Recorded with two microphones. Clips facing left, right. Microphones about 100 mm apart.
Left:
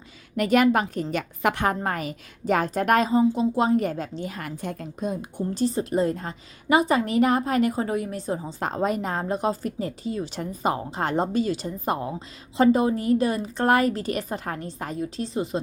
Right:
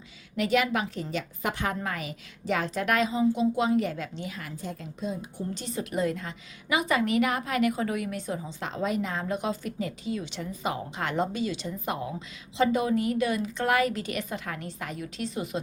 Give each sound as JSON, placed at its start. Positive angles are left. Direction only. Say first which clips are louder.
{"t": 0.3, "sound": "a woman's voice", "louder": "left 6 dB", "side_deg": 50}
{"t": 1.1, "sound": "a woman's voice", "louder": "left 7 dB", "side_deg": 65}
{"t": 1.6, "sound": "a woman's voice", "louder": "left 6 dB", "side_deg": 45}
{"t": 5.5, "sound": "a woman's voice", "louder": "left 8 dB", "side_deg": 35}